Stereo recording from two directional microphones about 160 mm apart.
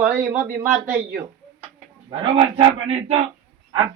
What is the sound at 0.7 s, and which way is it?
Speech, 10° right (ahead or behind).